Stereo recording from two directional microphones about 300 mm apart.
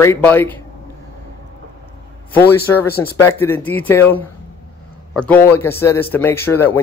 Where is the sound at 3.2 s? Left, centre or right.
Centre.